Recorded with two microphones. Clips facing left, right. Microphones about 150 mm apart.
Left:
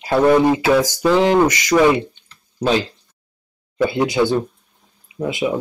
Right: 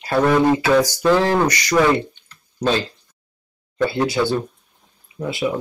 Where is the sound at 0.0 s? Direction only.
15° left (ahead or behind).